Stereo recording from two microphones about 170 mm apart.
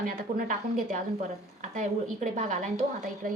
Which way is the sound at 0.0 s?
50° right (ahead or behind).